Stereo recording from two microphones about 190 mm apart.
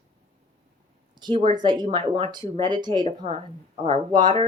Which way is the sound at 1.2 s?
25° right (ahead or behind).